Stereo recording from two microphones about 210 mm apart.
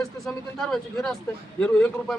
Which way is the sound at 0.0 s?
Centre (ahead or behind).